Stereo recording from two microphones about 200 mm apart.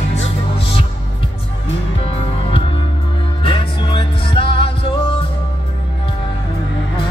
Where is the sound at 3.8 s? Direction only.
25° left (ahead or behind).